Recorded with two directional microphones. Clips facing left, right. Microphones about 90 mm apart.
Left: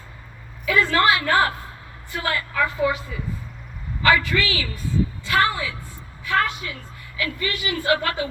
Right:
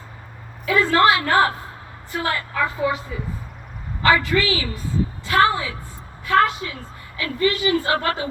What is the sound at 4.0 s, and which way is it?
A woman's voice, 25° right (ahead or behind).